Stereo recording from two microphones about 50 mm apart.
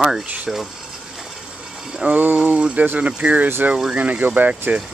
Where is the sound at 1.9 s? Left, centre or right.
Centre.